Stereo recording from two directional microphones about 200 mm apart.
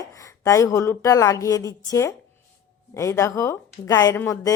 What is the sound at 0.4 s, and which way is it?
A woman's voice, 15° left (ahead or behind).